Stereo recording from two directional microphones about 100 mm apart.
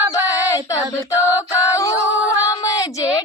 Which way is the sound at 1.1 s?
20° right (ahead or behind).